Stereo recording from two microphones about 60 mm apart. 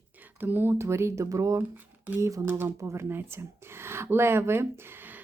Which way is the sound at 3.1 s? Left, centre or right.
Right.